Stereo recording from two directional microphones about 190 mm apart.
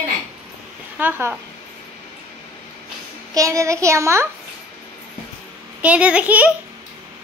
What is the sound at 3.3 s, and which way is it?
A child's voice, 15° right (ahead or behind).